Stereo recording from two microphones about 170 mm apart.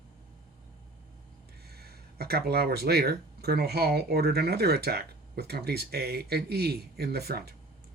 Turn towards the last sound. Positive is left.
turn(degrees=-70)  # may be behind; listen again after turning